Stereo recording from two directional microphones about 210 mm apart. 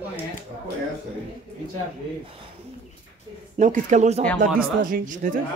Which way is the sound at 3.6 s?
35° right (ahead or behind).